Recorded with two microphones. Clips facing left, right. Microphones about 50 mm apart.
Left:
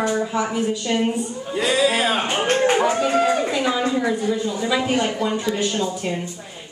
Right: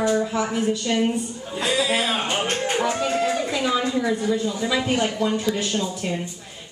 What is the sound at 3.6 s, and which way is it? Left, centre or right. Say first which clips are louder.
A woman's voice: left 2 dB; centre.